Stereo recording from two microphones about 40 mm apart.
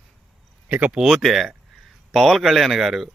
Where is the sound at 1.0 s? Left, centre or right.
Centre.